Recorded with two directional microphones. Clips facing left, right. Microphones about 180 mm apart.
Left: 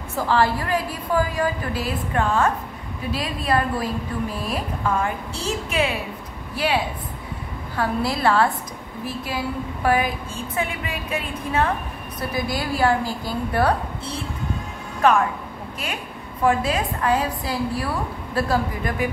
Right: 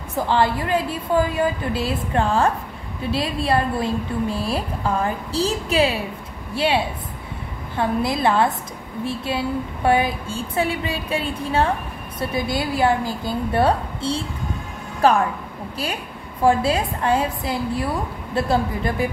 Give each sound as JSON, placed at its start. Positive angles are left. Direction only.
{"t": 0.1, "sound": "a woman's voice", "side_deg": -20}
{"t": 16.4, "sound": "a woman's voice", "side_deg": -30}